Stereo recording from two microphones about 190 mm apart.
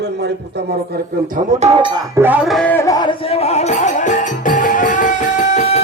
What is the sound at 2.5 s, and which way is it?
Music, 10° left (ahead or behind).